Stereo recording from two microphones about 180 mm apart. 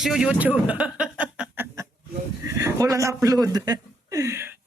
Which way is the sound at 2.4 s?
15° right (ahead or behind).